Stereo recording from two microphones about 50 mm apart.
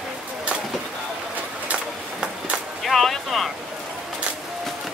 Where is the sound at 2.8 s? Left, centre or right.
Centre.